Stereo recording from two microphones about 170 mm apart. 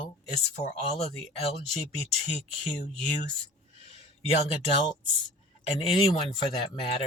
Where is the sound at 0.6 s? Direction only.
40° left (ahead or behind).